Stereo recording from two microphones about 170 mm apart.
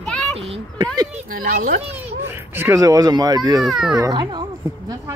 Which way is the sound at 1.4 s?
55° right (ahead or behind).